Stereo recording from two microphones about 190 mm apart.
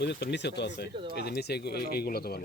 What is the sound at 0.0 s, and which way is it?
Speech, 60° left (ahead or behind).